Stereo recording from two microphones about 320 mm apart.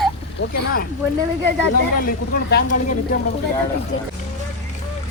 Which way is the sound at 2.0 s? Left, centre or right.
Left.